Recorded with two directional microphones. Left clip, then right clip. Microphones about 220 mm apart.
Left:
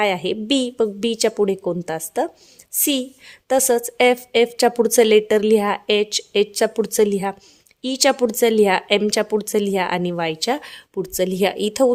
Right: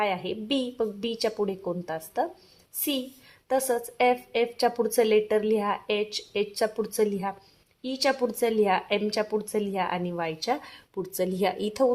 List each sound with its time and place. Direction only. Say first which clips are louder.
0.0 s a woman's voice: left 8 dB; 50° left (ahead or behind)